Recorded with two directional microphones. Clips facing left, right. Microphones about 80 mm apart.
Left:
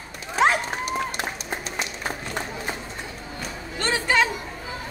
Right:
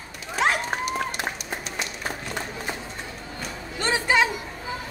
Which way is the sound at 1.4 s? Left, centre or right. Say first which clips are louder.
Left 2 dB; left.